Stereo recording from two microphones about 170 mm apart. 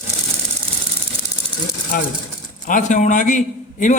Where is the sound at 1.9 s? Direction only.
55° left (ahead or behind).